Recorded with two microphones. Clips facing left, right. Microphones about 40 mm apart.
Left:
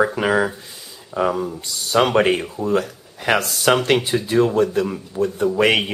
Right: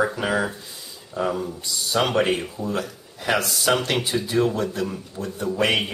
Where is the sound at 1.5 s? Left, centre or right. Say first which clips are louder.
Left 3 dB; left.